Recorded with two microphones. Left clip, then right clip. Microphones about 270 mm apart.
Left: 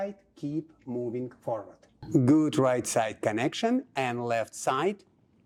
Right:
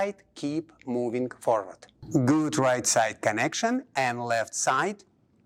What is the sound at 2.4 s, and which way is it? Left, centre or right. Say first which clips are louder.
Speech: right 1 dB; right.